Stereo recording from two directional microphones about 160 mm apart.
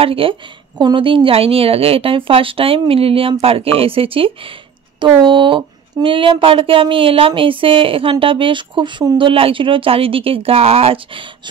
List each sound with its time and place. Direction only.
0.0 s a woman's voice: 35° right (ahead or behind)